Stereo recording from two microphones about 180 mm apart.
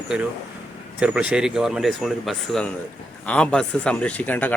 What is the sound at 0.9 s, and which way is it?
A man's voice, 5° right (ahead or behind).